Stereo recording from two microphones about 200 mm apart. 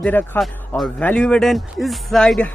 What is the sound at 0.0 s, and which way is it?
Speech, 10° left (ahead or behind).